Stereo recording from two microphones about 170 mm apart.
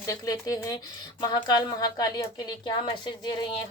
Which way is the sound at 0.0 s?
20° left (ahead or behind).